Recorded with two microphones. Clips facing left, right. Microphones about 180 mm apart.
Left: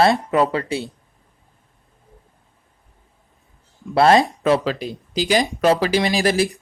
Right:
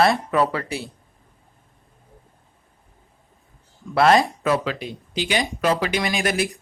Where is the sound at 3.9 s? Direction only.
30° left (ahead or behind).